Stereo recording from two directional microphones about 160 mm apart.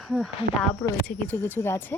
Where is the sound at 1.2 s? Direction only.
10° left (ahead or behind).